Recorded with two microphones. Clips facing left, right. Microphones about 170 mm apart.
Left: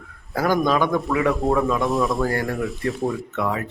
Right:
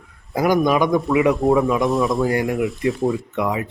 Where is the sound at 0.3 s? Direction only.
15° right (ahead or behind).